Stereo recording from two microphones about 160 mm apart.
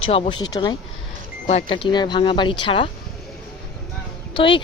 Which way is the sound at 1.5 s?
40° left (ahead or behind).